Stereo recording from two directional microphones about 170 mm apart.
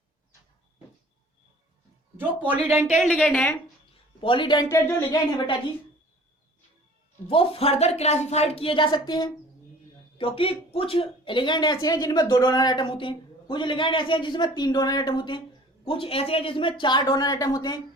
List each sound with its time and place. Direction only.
2.1 s a woman's voice: 10° right (ahead or behind)
4.2 s speech: 30° left (ahead or behind)
7.3 s speech: 35° left (ahead or behind)